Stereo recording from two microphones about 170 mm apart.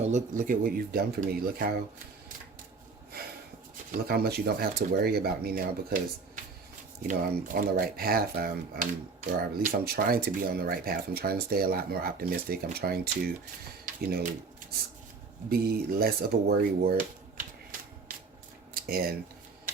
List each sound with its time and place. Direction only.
0.0 s speech: 45° right (ahead or behind)
3.9 s speech: 65° right (ahead or behind)
15.4 s speech: 60° right (ahead or behind)
18.7 s a sound: 60° right (ahead or behind)